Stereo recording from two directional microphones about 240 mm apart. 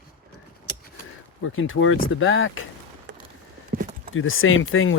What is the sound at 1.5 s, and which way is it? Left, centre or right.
Speech, left.